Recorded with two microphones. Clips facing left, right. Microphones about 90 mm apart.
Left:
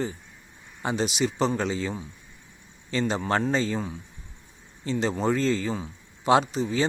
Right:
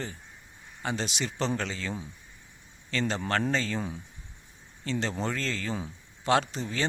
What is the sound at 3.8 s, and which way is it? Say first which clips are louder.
Speech: left 2 dB; centre (ahead or behind).